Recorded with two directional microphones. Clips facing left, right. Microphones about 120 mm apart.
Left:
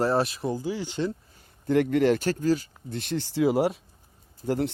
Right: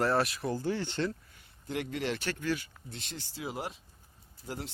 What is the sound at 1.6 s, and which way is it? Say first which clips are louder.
Speech: left 13 dB; 55° left (ahead or behind).